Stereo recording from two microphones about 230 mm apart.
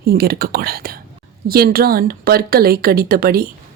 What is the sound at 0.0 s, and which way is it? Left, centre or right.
A woman's voice, right.